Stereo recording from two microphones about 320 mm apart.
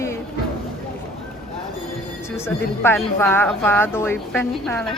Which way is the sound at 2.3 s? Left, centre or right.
Centre.